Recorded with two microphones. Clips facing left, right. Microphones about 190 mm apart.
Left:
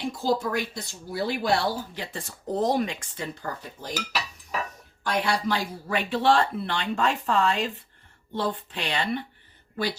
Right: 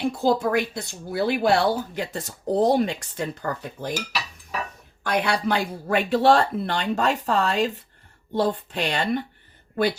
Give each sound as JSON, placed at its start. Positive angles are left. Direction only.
{"t": 0.1, "sound": "speech", "side_deg": -55}
{"t": 2.1, "sound": "speech", "side_deg": -35}
{"t": 3.4, "sound": "speech", "side_deg": -60}
{"t": 5.0, "sound": "speech", "side_deg": -60}
{"t": 6.1, "sound": "speech", "side_deg": -40}